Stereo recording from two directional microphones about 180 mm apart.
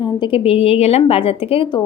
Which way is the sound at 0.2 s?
30° left (ahead or behind).